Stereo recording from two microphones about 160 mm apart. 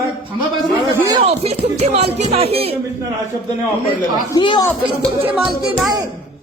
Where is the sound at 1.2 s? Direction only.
40° right (ahead or behind).